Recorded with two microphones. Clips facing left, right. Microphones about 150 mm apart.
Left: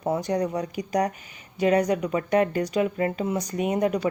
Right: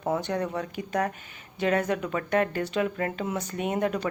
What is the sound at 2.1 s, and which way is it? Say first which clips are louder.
Speech: left 4 dB; 15° left (ahead or behind).